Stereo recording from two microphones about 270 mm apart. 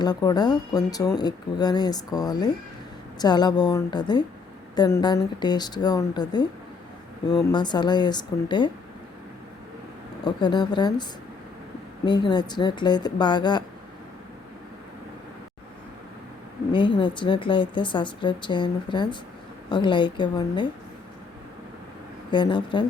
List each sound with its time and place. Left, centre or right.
0.0 s speech: centre
10.2 s speech: centre
12.0 s speech: centre
16.7 s speech: centre
22.3 s speech: centre